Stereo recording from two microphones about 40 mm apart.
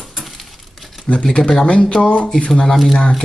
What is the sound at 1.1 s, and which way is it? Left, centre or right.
Speech, left.